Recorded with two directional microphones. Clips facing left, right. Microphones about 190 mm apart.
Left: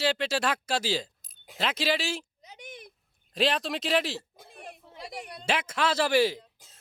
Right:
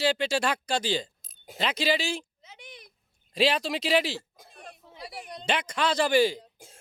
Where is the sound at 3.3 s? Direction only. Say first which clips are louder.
Right 2 dB; centre (ahead or behind).